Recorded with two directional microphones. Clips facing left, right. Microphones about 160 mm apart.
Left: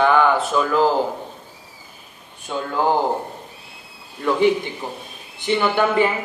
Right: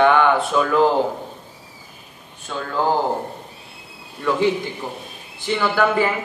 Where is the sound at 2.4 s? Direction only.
10° left (ahead or behind).